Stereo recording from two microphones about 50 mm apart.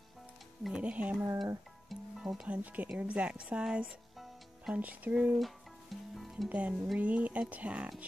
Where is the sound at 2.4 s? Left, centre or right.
Right.